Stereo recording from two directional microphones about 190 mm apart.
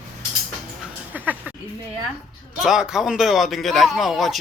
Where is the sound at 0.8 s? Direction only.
10° right (ahead or behind).